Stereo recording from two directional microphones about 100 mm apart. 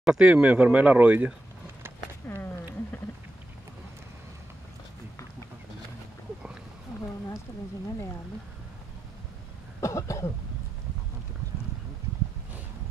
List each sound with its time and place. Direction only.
0.0 s speech: 5° right (ahead or behind)
2.2 s a sound: 25° left (ahead or behind)
9.8 s cough: 30° left (ahead or behind)